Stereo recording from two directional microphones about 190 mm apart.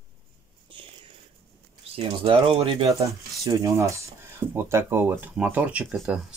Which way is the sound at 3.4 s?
15° right (ahead or behind).